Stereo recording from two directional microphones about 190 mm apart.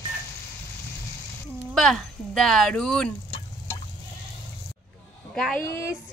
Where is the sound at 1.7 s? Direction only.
5° left (ahead or behind).